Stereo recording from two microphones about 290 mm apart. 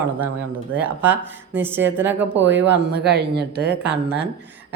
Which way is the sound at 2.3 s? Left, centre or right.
Right.